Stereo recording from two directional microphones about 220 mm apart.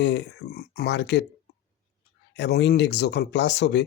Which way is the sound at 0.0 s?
50° left (ahead or behind).